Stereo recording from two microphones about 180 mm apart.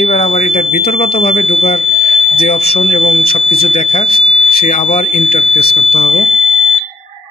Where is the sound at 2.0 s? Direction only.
55° left (ahead or behind).